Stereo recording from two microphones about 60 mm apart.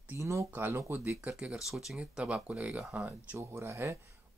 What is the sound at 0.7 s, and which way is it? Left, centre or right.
Speech, right.